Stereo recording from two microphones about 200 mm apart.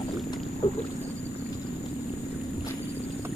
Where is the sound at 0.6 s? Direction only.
30° left (ahead or behind).